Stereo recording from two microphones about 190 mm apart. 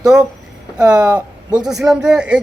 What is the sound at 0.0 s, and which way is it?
A man's voice, 5° right (ahead or behind).